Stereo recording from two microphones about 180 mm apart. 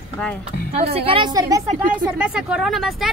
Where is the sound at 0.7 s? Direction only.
35° right (ahead or behind).